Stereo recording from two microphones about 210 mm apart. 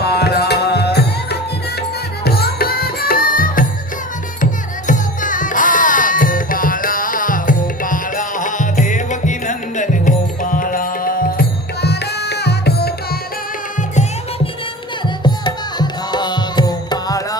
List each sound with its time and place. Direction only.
0.0 s tabla: 50° left (ahead or behind)
2.2 s music: 45° left (ahead or behind)
4.9 s music: 40° left (ahead or behind)
15.2 s music: 20° left (ahead or behind)